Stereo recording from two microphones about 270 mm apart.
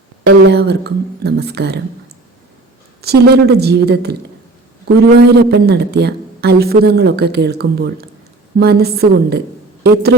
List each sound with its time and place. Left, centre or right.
0.3 s a woman's voice: right
3.0 s a woman's voice: right
5.3 s a woman's voice: right